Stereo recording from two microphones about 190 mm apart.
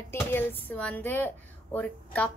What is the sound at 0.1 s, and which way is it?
Speech, 10° left (ahead or behind).